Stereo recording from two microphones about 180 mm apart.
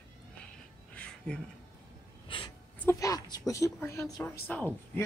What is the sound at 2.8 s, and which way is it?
Speech, 20° left (ahead or behind).